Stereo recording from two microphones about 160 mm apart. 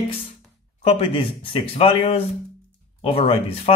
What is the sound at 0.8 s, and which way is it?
Speech, 35° left (ahead or behind).